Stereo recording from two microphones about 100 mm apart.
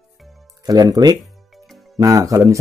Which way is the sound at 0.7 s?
40° right (ahead or behind).